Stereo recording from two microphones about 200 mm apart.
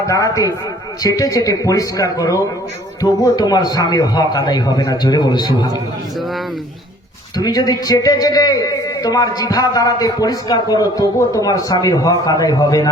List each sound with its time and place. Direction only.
0.0 s a man's voice: 15° left (ahead or behind)
7.3 s a man's voice: 20° left (ahead or behind)